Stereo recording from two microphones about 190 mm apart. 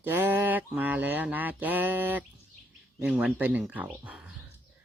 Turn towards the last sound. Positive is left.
turn(degrees=-5)  # may be behind; listen again after turning